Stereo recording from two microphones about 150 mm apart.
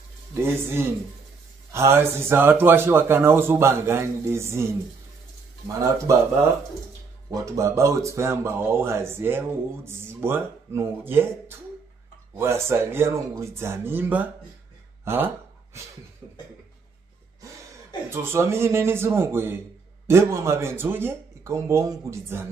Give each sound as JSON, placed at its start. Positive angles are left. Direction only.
{"t": 0.3, "sound": "speech", "side_deg": -15}
{"t": 5.8, "sound": "speech", "side_deg": -20}
{"t": 15.0, "sound": "a sound", "side_deg": -15}
{"t": 18.1, "sound": "speech", "side_deg": -15}